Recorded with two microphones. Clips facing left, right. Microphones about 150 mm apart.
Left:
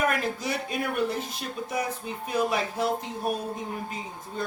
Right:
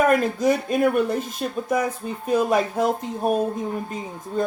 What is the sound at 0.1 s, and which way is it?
Speech, 45° right (ahead or behind).